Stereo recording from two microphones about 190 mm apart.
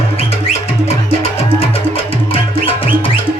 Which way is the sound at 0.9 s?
30° left (ahead or behind).